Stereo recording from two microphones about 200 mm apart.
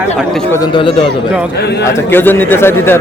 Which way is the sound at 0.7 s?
25° left (ahead or behind).